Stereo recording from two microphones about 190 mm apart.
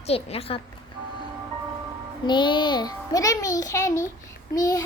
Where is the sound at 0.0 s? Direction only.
30° left (ahead or behind).